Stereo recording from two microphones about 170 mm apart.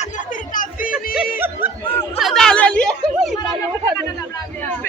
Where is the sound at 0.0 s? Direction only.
50° left (ahead or behind).